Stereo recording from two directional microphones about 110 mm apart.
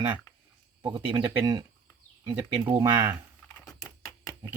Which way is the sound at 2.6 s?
20° right (ahead or behind).